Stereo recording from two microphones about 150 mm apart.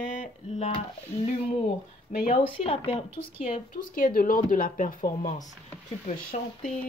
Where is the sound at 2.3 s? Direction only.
40° left (ahead or behind).